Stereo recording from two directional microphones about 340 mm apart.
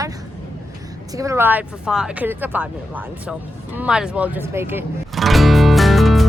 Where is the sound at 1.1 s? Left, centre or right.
Centre.